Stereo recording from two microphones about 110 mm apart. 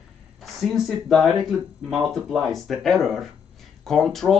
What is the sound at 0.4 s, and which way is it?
Speech, centre (ahead or behind).